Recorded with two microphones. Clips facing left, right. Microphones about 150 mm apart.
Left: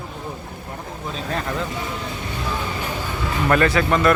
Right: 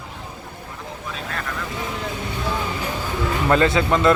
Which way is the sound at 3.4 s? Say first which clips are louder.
Even; 20° right (ahead or behind).